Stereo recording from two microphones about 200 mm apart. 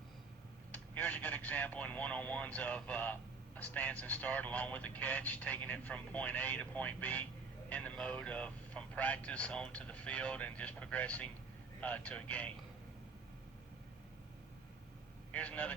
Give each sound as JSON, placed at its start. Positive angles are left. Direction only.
{"t": 0.7, "sound": "speech", "side_deg": 10}
{"t": 15.3, "sound": "a man's voice", "side_deg": 5}